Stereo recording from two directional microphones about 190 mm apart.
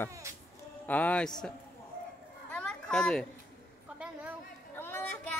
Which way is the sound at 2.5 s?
5° left (ahead or behind).